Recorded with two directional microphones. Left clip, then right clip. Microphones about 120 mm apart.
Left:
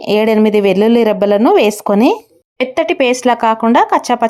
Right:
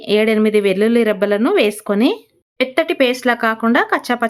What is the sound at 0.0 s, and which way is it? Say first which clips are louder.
Speech: left 3 dB; 25° left (ahead or behind).